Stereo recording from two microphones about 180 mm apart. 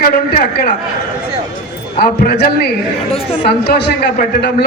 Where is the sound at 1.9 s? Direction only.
60° left (ahead or behind).